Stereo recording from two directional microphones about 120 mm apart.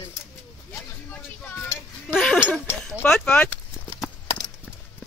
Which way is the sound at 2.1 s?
5° left (ahead or behind).